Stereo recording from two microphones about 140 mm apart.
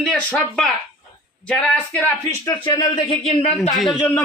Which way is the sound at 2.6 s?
35° left (ahead or behind).